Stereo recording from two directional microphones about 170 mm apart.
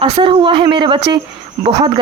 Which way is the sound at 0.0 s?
30° right (ahead or behind).